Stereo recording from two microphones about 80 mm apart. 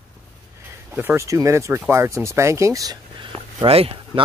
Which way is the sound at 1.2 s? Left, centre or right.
Right.